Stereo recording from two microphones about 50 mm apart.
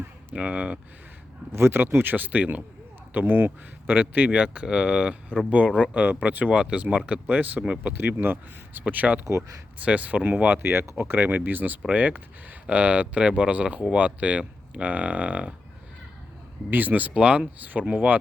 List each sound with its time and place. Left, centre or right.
0.3 s speech: right
1.5 s speech: right
2.1 s speech: right
4.3 s speech: centre
6.5 s speech: right
7.9 s speech: right
8.8 s speech: right
10.5 s speech: right
11.2 s speech: right
16.6 s speech: right
17.2 s speech: right